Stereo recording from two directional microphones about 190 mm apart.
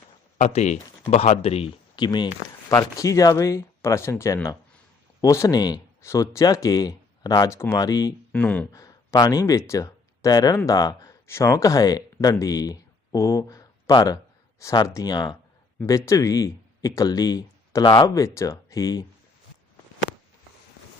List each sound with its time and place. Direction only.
0.3 s speech: 40° left (ahead or behind); by 8.1 s 20° left (ahead or behind)
8.3 s speech: 5° left (ahead or behind)
8.8 s speech: 20° left (ahead or behind)